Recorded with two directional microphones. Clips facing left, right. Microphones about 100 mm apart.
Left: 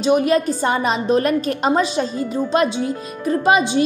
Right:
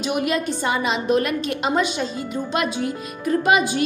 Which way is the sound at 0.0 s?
35° left (ahead or behind).